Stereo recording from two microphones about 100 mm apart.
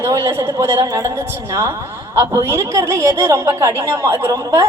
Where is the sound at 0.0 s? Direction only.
30° right (ahead or behind).